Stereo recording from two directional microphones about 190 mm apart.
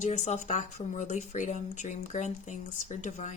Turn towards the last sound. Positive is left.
turn(degrees=40)  # may be behind; listen again after turning